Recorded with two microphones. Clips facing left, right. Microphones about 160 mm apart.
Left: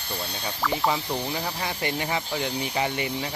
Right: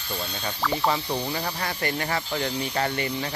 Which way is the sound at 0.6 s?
5° left (ahead or behind).